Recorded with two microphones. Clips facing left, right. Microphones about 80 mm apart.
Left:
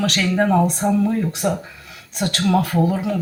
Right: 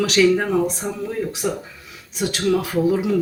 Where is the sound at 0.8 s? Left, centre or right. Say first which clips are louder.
Left 6 dB; left.